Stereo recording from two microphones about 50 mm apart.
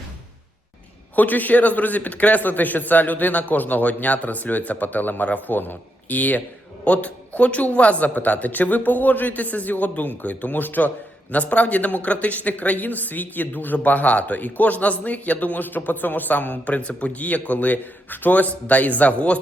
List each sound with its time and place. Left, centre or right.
1.1 s speech: left